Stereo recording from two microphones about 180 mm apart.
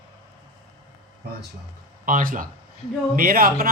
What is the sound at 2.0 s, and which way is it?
A man's voice, 50° right (ahead or behind).